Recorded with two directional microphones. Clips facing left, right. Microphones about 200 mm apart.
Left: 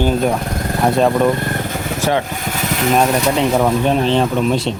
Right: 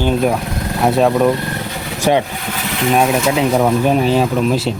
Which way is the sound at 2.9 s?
5° right (ahead or behind).